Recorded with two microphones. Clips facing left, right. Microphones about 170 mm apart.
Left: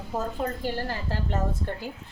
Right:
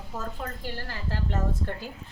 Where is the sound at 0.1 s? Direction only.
30° left (ahead or behind).